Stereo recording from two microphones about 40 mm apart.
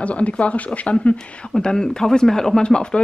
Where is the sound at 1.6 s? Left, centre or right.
Centre.